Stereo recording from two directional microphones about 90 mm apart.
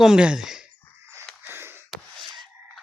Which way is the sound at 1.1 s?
25° right (ahead or behind).